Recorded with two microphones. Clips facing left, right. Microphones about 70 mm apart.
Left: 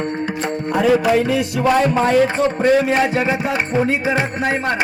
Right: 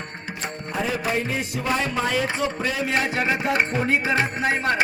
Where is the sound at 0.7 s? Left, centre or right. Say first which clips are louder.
Left 11 dB; left.